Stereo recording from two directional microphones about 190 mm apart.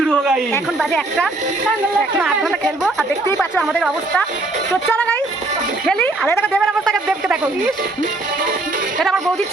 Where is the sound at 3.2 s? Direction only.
10° left (ahead or behind).